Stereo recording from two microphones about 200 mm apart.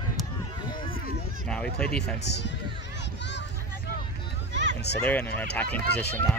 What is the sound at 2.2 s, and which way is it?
Speech, 60° left (ahead or behind).